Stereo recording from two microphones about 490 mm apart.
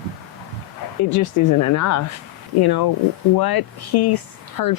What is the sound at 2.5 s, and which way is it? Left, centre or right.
Speech, left.